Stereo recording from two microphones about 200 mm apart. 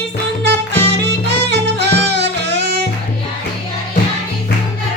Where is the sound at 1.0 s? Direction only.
60° right (ahead or behind).